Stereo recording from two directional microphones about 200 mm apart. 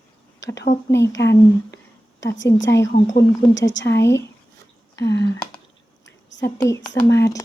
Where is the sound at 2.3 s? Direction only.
65° left (ahead or behind).